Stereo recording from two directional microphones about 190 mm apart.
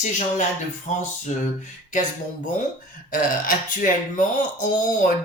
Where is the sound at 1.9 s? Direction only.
40° left (ahead or behind).